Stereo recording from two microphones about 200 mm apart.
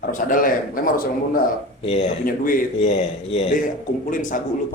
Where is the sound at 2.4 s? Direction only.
40° left (ahead or behind).